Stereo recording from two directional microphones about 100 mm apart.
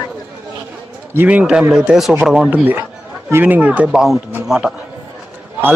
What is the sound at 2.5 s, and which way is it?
A man's voice, 15° right (ahead or behind).